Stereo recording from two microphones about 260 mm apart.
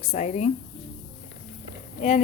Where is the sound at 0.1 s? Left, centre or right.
Left.